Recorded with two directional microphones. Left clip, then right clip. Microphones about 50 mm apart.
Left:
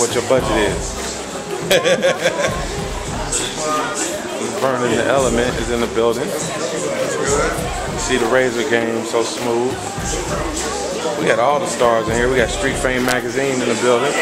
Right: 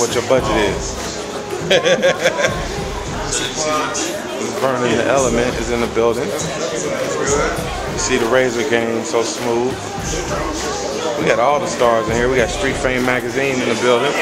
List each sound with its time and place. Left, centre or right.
0.0 s speech: centre; by 2.5 s right
4.6 s speech: centre
7.2 s speech: centre
11.2 s speech: centre
12.1 s speech: centre
13.4 s speech: centre